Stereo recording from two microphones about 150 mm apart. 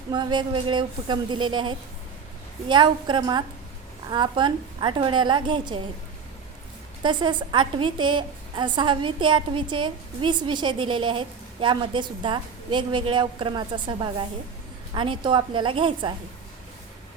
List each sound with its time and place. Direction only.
0.1 s a woman's voice: 30° right (ahead or behind)
7.0 s a woman's voice: 30° right (ahead or behind)